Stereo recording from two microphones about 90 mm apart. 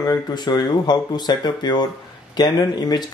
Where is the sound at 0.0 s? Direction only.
50° left (ahead or behind).